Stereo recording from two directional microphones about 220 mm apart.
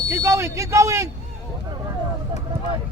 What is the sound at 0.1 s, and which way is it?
Speech, 10° right (ahead or behind).